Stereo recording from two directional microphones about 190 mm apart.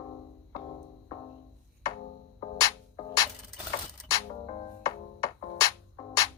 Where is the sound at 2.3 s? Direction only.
20° left (ahead or behind).